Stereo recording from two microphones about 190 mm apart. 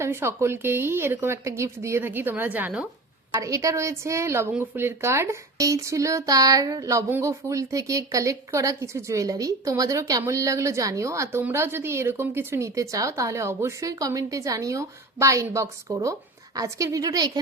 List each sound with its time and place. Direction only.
0.0 s a woman's voice: 15° right (ahead or behind)